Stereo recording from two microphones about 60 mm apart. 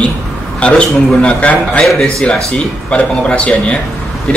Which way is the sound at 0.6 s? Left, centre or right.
Centre.